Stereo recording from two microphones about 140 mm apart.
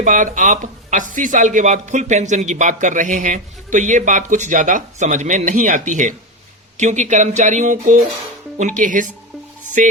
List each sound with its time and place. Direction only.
0.0 s speech: 65° right (ahead or behind)